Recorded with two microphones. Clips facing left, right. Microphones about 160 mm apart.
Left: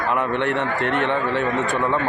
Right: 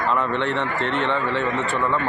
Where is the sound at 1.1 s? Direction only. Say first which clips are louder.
Left 1 dB; 15° left (ahead or behind).